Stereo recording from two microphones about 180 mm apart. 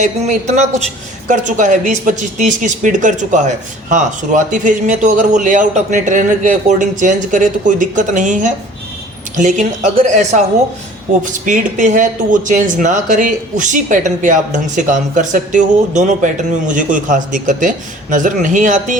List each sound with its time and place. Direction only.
0.0 s a man's voice: 40° right (ahead or behind)